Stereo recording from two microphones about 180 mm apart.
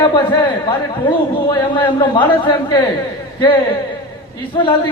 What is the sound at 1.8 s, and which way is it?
A man's voice, 25° left (ahead or behind).